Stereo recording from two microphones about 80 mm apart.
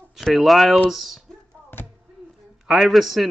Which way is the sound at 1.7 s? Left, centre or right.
Left.